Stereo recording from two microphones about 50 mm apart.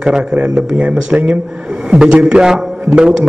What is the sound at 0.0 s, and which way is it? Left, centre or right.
A man's voice, centre.